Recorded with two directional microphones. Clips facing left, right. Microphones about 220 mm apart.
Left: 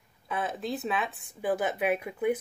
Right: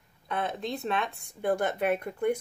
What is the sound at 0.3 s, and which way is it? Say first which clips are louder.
Speech: even; 5° left (ahead or behind).